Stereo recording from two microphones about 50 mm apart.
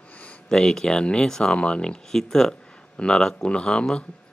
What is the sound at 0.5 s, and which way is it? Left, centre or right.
Speech, centre.